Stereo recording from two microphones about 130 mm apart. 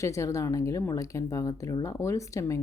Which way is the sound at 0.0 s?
25° left (ahead or behind).